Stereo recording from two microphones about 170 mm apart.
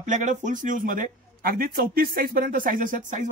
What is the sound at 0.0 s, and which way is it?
A man's voice, 45° right (ahead or behind).